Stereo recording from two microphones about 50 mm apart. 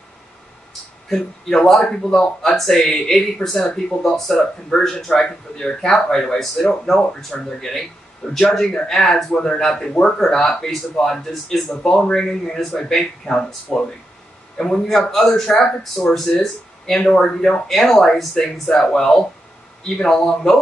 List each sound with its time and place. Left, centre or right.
1.0 s speech: centre
4.7 s speech: centre
6.9 s speech: centre
7.4 s speech: centre